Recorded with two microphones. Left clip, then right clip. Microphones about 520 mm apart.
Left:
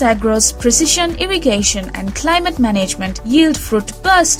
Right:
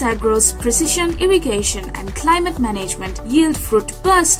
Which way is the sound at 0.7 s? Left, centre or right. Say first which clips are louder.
Left 6 dB; centre.